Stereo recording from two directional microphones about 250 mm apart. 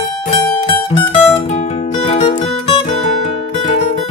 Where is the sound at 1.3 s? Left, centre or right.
Left.